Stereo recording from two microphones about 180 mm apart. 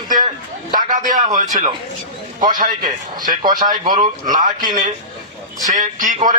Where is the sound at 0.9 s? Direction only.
45° right (ahead or behind).